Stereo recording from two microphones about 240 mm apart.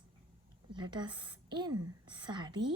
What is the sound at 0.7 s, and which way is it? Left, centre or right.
A woman's voice, centre.